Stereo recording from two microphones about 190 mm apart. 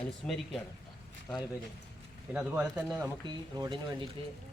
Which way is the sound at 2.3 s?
10° right (ahead or behind).